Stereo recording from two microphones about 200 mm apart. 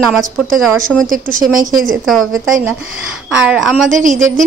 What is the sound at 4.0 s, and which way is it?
Speech, 40° right (ahead or behind).